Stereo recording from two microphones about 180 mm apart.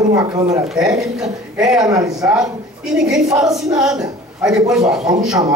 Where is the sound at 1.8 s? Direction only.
20° right (ahead or behind).